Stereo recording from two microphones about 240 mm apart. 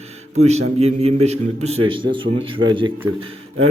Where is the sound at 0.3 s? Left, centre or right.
Right.